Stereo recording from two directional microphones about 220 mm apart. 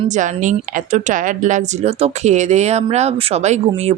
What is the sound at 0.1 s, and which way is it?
A woman's voice, 35° right (ahead or behind).